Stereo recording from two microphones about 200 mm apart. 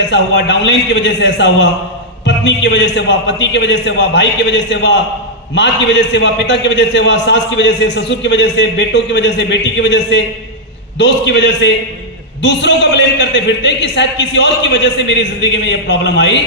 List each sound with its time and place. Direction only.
0.1 s a man's voice: 60° left (ahead or behind)